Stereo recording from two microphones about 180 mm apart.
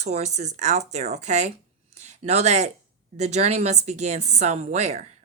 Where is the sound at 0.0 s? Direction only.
40° right (ahead or behind).